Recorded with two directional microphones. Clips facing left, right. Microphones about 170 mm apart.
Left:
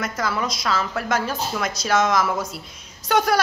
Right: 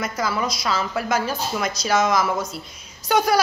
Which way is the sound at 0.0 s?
Centre (ahead or behind).